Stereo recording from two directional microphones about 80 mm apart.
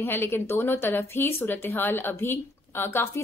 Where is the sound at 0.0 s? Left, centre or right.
Left.